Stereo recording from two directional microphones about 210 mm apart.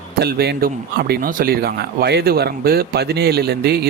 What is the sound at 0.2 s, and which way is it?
Speech, 50° right (ahead or behind).